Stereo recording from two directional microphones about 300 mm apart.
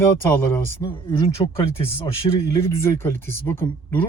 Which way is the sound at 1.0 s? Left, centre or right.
Centre.